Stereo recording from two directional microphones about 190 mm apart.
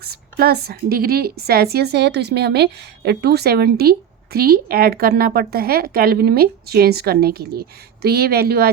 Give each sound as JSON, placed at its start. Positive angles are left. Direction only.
{"t": 0.0, "sound": "a woman's voice", "side_deg": -55}